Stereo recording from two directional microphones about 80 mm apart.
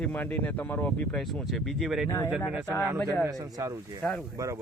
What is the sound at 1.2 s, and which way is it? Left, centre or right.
Speech, centre.